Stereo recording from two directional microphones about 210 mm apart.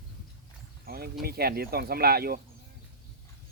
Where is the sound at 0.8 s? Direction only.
45° right (ahead or behind).